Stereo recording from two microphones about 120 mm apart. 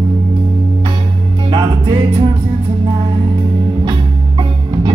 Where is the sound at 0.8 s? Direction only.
40° right (ahead or behind).